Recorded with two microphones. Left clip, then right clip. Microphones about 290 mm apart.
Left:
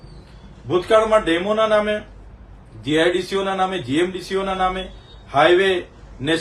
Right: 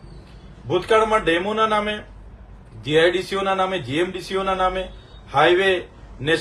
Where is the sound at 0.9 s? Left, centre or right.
Centre.